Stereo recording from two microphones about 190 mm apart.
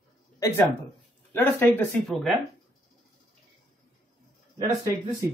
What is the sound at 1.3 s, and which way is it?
Speech, 10° left (ahead or behind).